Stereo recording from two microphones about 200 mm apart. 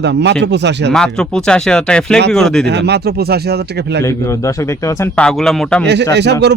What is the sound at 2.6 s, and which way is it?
Speech, 55° right (ahead or behind).